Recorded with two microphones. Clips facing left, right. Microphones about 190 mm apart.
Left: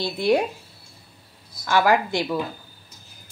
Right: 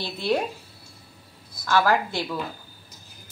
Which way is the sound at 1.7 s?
15° left (ahead or behind).